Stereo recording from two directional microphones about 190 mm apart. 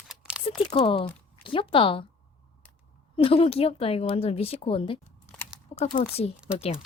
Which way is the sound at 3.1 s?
30° left (ahead or behind).